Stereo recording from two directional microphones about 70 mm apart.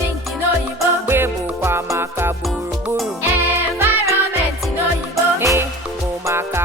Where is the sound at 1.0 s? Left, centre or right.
Right.